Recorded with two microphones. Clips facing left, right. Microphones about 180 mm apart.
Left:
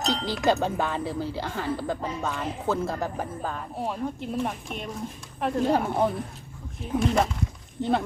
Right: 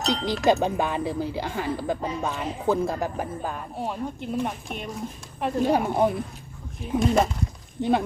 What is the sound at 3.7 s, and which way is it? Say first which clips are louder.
Speech: even; centre (ahead or behind).